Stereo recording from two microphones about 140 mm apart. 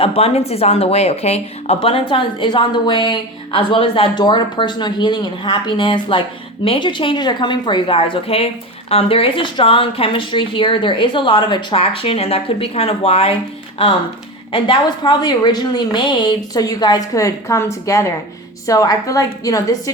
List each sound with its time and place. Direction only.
0.0 s a woman's voice: 45° left (ahead or behind)
14.5 s a woman's voice: 35° left (ahead or behind)